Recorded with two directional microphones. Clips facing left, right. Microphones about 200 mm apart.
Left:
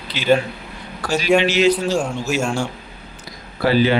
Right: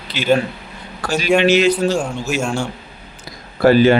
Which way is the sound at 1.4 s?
55° right (ahead or behind).